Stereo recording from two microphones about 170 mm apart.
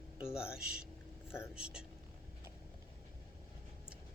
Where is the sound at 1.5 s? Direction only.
5° right (ahead or behind).